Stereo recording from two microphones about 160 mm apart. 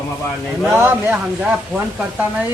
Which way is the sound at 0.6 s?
15° right (ahead or behind).